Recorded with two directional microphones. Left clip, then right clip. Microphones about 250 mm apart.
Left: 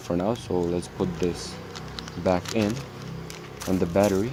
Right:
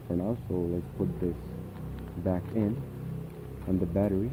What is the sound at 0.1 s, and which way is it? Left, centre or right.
Speech, left.